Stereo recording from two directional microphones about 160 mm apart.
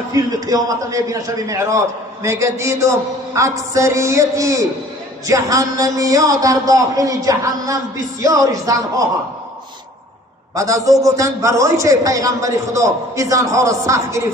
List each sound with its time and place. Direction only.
0.1 s a man's voice: 20° right (ahead or behind)
10.5 s a man's voice: 20° right (ahead or behind)